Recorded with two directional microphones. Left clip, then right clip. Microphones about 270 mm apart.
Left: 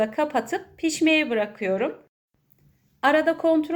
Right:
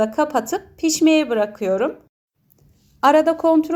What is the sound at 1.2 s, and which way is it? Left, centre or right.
Speech, right.